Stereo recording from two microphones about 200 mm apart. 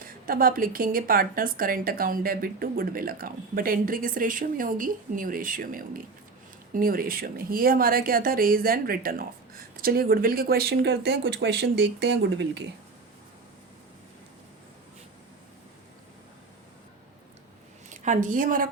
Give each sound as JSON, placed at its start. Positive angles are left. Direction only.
{"t": 0.0, "sound": "a woman's voice", "side_deg": -45}
{"t": 17.8, "sound": "a woman's voice", "side_deg": -40}